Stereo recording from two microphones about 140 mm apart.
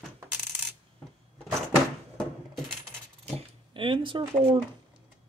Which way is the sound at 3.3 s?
40° right (ahead or behind).